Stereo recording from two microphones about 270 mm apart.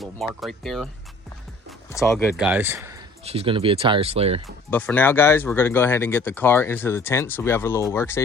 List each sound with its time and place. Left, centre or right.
0.0 s speech: centre
1.9 s speech: centre
3.2 s speech: right
4.4 s speech: centre